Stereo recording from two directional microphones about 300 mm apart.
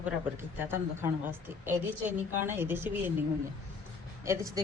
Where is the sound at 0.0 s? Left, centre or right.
Centre.